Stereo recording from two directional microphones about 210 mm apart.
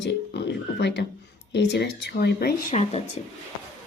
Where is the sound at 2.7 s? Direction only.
30° left (ahead or behind).